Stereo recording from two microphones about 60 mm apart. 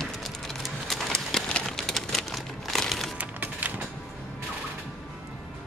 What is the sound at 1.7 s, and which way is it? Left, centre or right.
Crumpling, centre.